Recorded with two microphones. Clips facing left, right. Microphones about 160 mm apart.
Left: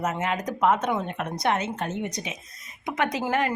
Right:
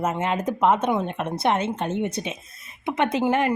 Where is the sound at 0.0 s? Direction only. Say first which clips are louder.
Right 3 dB; 30° right (ahead or behind).